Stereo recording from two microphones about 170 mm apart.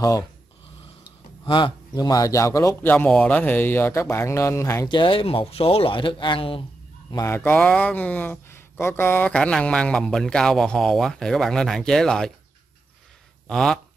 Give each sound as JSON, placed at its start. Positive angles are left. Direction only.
{"t": 1.4, "sound": "a man's voice", "side_deg": 25}
{"t": 4.9, "sound": "speech", "side_deg": 30}
{"t": 7.1, "sound": "a man's voice", "side_deg": 20}
{"t": 13.5, "sound": "speech", "side_deg": 5}